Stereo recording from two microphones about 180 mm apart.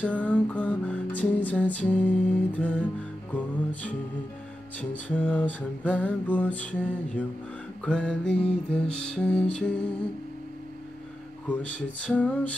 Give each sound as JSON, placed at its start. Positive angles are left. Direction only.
{"t": 0.0, "sound": "music", "side_deg": 10}
{"t": 4.7, "sound": "music", "side_deg": 10}
{"t": 11.4, "sound": "music", "side_deg": 5}